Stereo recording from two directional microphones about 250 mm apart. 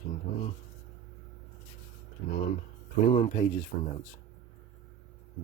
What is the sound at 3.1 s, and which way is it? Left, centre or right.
Speech, left.